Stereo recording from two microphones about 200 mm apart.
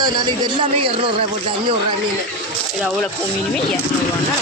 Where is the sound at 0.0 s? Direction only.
20° right (ahead or behind).